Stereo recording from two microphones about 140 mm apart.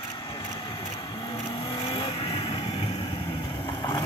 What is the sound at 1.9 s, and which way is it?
Vehicle, 40° left (ahead or behind).